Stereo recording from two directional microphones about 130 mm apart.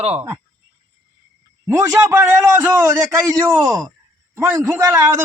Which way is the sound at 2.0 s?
15° right (ahead or behind).